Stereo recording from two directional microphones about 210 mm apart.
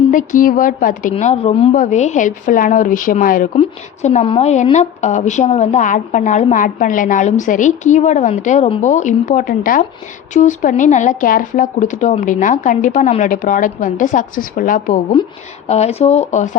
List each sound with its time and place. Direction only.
0.1 s a woman's voice: 40° left (ahead or behind)
15.1 s a woman's voice: 25° left (ahead or behind)